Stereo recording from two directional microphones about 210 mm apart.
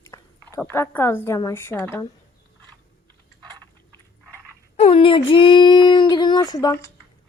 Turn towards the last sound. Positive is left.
turn(degrees=15)  # may be behind; listen again after turning